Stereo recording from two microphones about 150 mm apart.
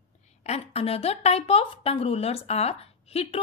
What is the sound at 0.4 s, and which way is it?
A woman's voice, 45° left (ahead or behind).